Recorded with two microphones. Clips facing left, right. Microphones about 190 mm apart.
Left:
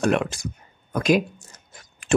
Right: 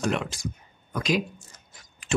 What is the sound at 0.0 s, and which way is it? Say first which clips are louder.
Speech: left 6 dB; 60° left (ahead or behind).